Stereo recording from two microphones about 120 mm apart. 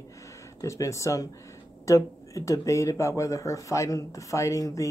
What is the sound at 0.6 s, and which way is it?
Speech, 25° left (ahead or behind).